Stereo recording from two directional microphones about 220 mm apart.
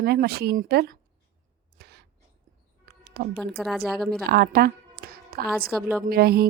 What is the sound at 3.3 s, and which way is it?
Speech, centre (ahead or behind).